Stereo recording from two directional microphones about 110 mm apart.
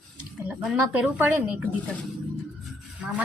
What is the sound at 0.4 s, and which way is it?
Speech, 10° right (ahead or behind).